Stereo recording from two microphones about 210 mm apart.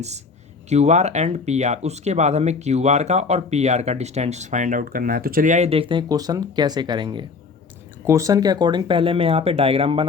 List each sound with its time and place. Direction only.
0.7 s speech: 30° right (ahead or behind)